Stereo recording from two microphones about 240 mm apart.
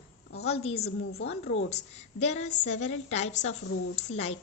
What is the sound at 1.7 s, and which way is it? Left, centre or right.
A woman's voice, left.